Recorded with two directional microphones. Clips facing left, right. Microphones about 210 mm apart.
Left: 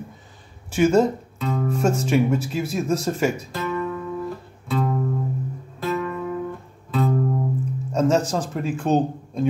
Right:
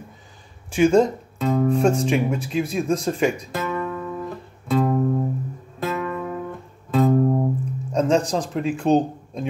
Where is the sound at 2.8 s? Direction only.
5° left (ahead or behind).